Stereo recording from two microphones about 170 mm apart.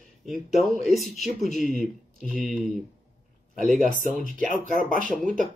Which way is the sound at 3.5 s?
50° right (ahead or behind).